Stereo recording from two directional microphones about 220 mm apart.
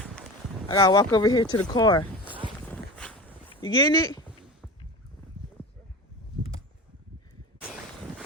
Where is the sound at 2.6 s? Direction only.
5° left (ahead or behind).